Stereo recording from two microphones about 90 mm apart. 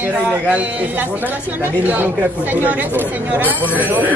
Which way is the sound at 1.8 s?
20° right (ahead or behind).